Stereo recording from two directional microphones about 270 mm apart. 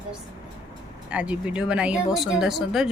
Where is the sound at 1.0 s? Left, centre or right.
Centre.